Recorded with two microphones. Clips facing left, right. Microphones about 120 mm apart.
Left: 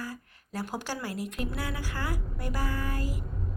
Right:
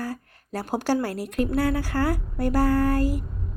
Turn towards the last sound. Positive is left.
turn(degrees=-65)  # may be behind; listen again after turning